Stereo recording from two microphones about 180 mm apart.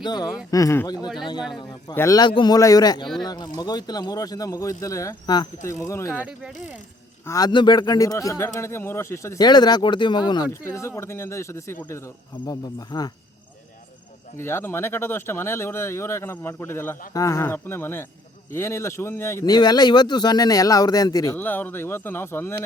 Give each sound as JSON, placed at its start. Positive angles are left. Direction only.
{"t": 0.0, "sound": "a man's voice", "side_deg": 20}
{"t": 0.9, "sound": "speech", "side_deg": -5}
{"t": 2.0, "sound": "a man's voice", "side_deg": 20}
{"t": 6.1, "sound": "speech", "side_deg": -5}
{"t": 7.3, "sound": "a man's voice", "side_deg": 20}
{"t": 14.3, "sound": "a man's voice", "side_deg": 15}